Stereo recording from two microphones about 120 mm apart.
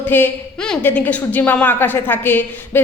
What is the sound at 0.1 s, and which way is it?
A woman's voice, 15° left (ahead or behind).